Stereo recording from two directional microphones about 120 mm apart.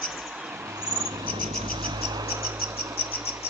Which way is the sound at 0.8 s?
30° right (ahead or behind).